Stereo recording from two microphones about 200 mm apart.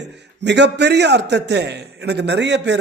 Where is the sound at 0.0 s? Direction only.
60° right (ahead or behind).